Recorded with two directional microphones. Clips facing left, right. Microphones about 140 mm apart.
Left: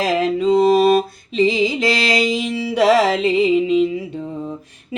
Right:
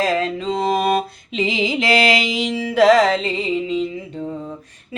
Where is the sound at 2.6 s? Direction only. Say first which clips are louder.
Right 1 dB; 5° left (ahead or behind); by 3.9 s 20° left (ahead or behind).